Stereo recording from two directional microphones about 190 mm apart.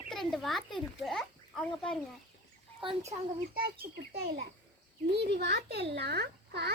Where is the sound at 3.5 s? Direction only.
55° right (ahead or behind).